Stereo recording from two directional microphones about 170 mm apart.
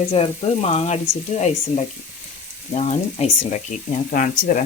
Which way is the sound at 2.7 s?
40° left (ahead or behind).